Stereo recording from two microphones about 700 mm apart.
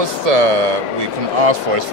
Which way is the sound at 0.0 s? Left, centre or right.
Right.